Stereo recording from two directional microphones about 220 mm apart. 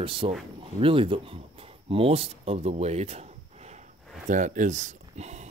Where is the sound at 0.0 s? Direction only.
25° right (ahead or behind).